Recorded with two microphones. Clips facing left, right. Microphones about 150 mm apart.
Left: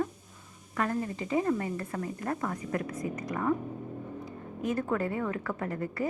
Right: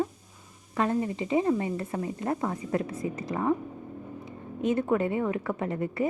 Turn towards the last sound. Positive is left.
turn(degrees=-20)  # may be behind; listen again after turning